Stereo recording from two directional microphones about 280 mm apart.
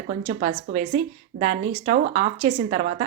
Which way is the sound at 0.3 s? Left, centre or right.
Right.